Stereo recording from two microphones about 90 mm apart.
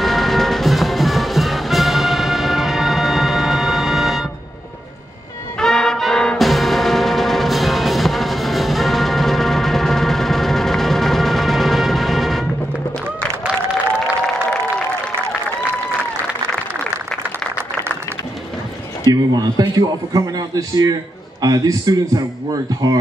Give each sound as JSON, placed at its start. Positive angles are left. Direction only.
{"t": 0.0, "sound": "music", "side_deg": 0}
{"t": 5.6, "sound": "music", "side_deg": 5}
{"t": 19.0, "sound": "a sound", "side_deg": -50}
{"t": 21.4, "sound": "a man's voice", "side_deg": -45}